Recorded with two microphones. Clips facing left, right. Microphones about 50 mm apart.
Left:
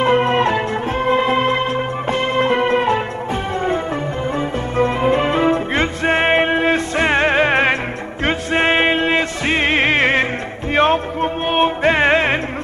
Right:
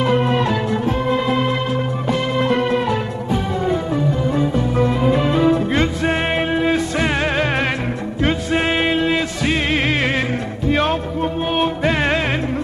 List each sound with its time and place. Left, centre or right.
0.0 s music: left
4.4 s music: left